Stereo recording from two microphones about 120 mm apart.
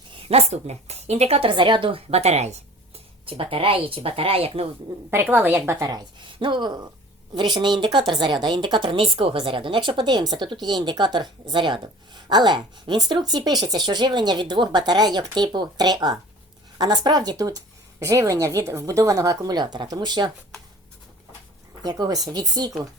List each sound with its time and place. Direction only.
0.2 s speech: 55° right (ahead or behind)
3.2 s speech: 50° right (ahead or behind)
5.1 s a woman's voice: 15° right (ahead or behind)
6.1 s a woman's voice: 40° right (ahead or behind)
21.8 s a woman's voice: 35° right (ahead or behind)